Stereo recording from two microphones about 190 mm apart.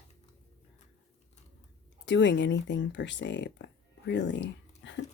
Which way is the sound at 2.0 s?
70° left (ahead or behind).